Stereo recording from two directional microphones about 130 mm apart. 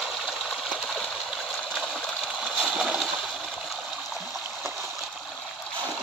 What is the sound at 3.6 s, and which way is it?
Stream, centre (ahead or behind).